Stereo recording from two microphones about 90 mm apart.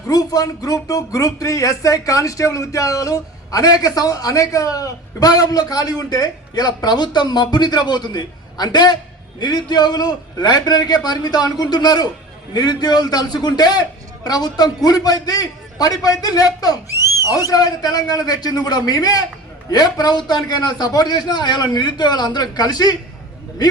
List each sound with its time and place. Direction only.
0.1 s speech: 45° left (ahead or behind)